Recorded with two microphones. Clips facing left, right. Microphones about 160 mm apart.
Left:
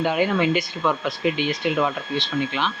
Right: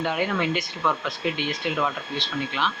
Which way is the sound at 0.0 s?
5° left (ahead or behind).